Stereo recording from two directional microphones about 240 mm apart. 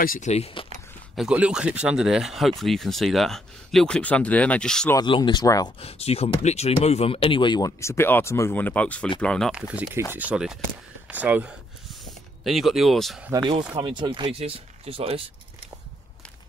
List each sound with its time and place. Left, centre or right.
0.0 s speech: left
1.1 s speech: centre
4.9 s speech: centre
11.1 s a sound: centre
12.4 s speech: centre
13.5 s speech: centre